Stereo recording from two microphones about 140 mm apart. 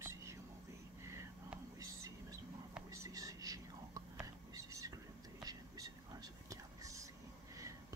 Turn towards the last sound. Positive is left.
turn(degrees=-25)  # may be behind; listen again after turning